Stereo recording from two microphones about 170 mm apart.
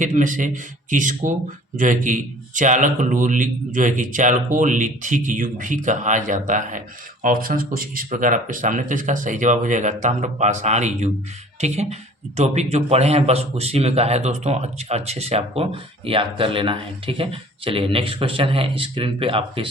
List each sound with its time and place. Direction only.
0.0 s a man's voice: 45° right (ahead or behind); by 19.6 s 30° right (ahead or behind)